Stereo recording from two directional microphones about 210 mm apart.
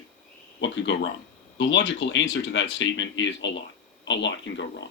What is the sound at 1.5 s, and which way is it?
Speech, 60° left (ahead or behind).